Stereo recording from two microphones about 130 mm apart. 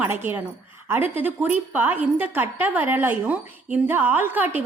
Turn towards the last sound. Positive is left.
turn(degrees=-15)  # may be behind; listen again after turning